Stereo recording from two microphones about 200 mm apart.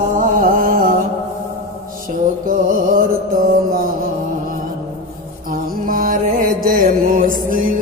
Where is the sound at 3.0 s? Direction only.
45° right (ahead or behind).